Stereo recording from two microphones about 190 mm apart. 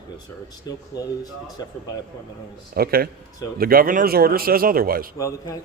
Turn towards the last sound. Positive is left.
turn(degrees=-50)  # may be behind; listen again after turning